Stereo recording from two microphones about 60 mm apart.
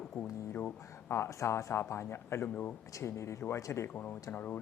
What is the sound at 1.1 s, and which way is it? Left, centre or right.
Speech, left.